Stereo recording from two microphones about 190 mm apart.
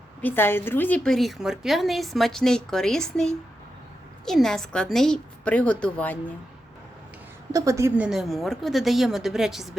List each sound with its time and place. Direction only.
0.2 s a woman's voice: 10° left (ahead or behind)
7.5 s a woman's voice: 15° right (ahead or behind)